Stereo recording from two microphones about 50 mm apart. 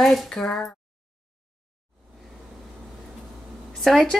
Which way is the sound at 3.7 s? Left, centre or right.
Centre.